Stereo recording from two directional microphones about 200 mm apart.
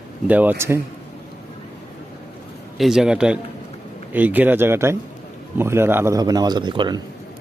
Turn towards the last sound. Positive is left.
turn(degrees=-25)  # may be behind; listen again after turning